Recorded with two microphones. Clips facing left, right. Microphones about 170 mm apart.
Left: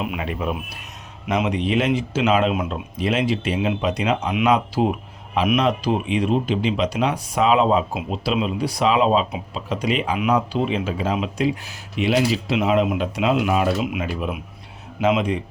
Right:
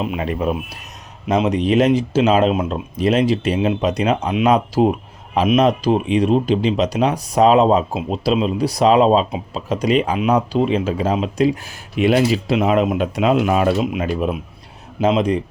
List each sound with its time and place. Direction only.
0.0 s speech: 30° right (ahead or behind)